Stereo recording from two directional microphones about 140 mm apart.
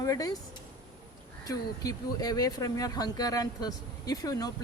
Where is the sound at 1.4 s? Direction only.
25° left (ahead or behind).